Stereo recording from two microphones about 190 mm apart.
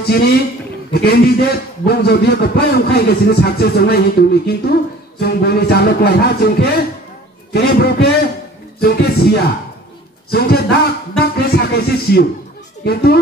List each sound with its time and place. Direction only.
0.0 s a man's voice: 55° left (ahead or behind)
10.3 s a man's voice: 55° left (ahead or behind)